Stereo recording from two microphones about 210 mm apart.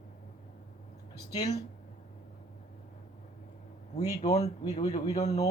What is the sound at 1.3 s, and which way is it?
Speech, 20° left (ahead or behind).